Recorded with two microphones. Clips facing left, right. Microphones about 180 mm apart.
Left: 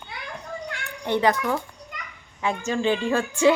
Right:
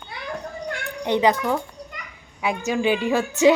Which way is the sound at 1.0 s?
15° right (ahead or behind).